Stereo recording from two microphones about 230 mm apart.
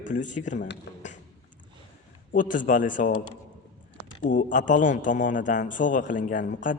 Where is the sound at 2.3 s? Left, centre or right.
Left.